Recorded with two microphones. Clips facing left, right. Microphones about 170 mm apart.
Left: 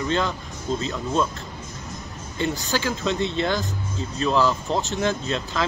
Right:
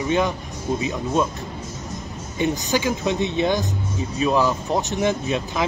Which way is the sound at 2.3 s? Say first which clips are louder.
Right 3 dB; 15° right (ahead or behind).